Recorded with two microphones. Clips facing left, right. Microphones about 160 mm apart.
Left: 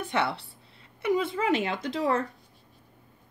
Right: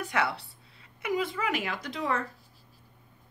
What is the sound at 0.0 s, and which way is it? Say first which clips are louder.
A woman's voice: left 1 dB; 25° left (ahead or behind).